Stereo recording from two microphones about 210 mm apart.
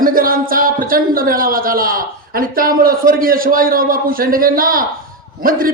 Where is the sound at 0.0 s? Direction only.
40° right (ahead or behind).